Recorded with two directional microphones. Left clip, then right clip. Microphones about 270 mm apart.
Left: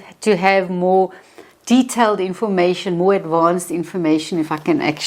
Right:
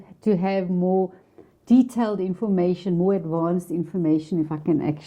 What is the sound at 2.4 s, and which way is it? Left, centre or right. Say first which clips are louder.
Speech: left 7 dB; centre.